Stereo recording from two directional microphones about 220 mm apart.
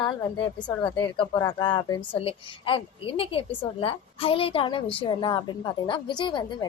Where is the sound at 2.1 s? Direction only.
25° left (ahead or behind).